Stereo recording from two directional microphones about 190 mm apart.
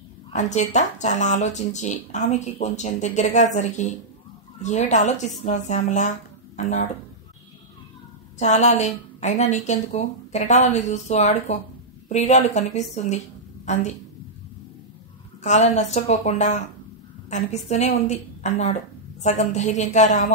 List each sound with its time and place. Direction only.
0.3 s speech: 40° left (ahead or behind)
8.4 s speech: 35° left (ahead or behind)
15.4 s speech: 40° left (ahead or behind)